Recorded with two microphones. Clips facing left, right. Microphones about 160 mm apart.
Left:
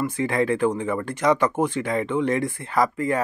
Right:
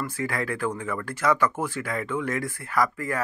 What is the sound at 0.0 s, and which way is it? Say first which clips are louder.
Speech: left 6 dB; 20° left (ahead or behind).